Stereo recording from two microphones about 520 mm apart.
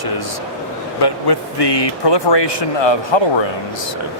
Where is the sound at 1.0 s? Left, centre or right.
Left.